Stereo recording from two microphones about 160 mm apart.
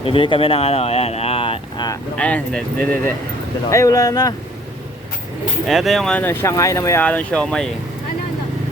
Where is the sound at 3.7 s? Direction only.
20° left (ahead or behind).